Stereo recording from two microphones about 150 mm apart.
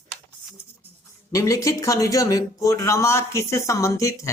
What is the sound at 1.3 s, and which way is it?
Speech, 20° left (ahead or behind).